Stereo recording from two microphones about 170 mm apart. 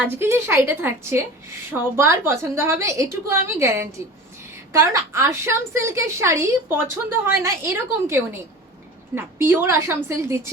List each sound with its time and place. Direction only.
0.0 s a woman's voice: 15° right (ahead or behind)